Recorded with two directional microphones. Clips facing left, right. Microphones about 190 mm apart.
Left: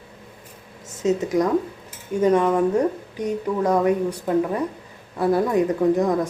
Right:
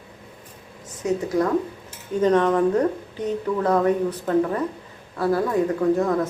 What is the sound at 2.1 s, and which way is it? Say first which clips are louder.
Speech: even; 10° left (ahead or behind).